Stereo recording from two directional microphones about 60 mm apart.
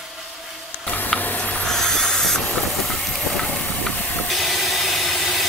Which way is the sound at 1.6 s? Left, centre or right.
Centre.